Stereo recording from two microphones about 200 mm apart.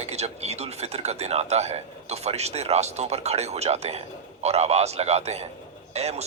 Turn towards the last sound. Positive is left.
turn(degrees=-30)  # may be behind; listen again after turning